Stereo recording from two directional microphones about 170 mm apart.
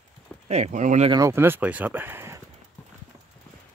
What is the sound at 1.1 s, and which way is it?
Speech, 15° right (ahead or behind).